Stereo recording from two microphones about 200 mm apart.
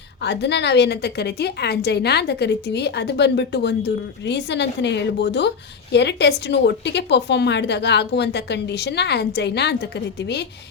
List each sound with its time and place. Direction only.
0.2 s a woman's voice: 60° left (ahead or behind)